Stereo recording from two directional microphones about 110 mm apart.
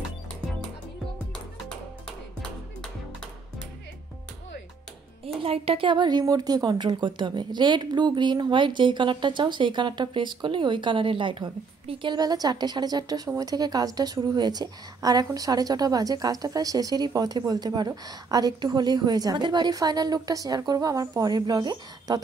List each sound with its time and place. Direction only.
5.2 s speech: 60° right (ahead or behind)
12.2 s a woman's voice: 35° right (ahead or behind)